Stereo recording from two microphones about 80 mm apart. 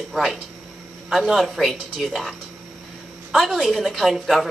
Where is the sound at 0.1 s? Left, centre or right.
Centre.